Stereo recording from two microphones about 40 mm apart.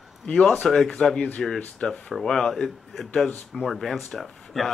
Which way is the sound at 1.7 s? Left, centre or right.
Left.